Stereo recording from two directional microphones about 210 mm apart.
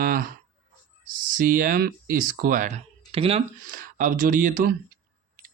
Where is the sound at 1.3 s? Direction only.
45° right (ahead or behind); by 3.4 s 30° right (ahead or behind).